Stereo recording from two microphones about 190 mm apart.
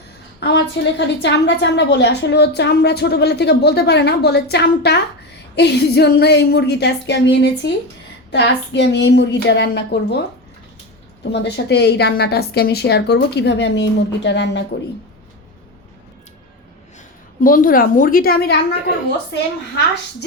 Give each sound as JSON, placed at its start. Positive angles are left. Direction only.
{"t": 0.3, "sound": "a woman's voice", "side_deg": 60}
{"t": 11.3, "sound": "a woman's voice", "side_deg": 60}
{"t": 17.4, "sound": "a woman's voice", "side_deg": 45}